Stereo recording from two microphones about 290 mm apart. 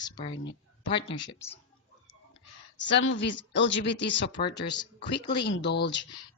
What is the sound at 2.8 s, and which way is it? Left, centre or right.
Speech, left.